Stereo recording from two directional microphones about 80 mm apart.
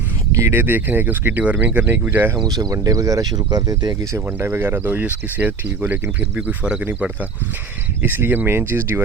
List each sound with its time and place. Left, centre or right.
0.5 s speech: right
2.4 s speech: right
4.0 s speech: right; by 6.8 s centre
8.0 s speech: right